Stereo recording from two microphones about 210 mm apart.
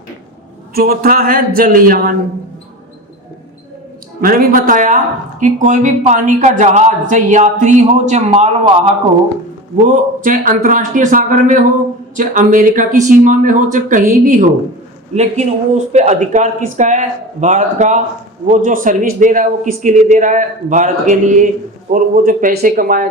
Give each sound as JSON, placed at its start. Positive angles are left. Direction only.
{"t": 0.7, "sound": "speech", "side_deg": -45}
{"t": 4.2, "sound": "speech", "side_deg": -40}
{"t": 9.8, "sound": "speech", "side_deg": -40}